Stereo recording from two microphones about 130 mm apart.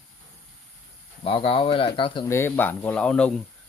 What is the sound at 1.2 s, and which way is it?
Speech, 40° left (ahead or behind).